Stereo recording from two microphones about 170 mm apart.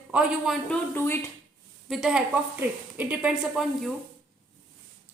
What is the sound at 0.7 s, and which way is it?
Speech, 15° left (ahead or behind).